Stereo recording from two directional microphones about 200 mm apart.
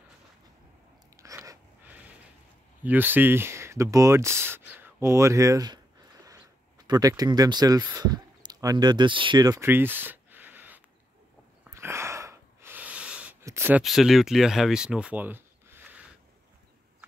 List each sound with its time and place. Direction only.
1.1 s a sound: 15° right (ahead or behind)
2.8 s speech: 10° right (ahead or behind)
11.6 s gasp: 10° right (ahead or behind)